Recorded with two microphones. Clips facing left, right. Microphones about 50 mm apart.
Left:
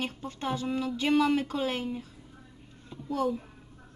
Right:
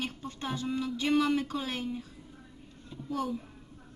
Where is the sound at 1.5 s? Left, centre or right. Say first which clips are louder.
Left 4 dB; left.